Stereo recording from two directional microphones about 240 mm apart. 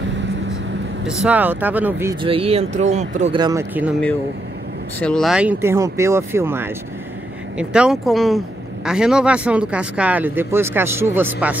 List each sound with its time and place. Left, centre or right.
1.0 s speech: centre
2.2 s speech: right
3.3 s speech: centre
5.0 s speech: centre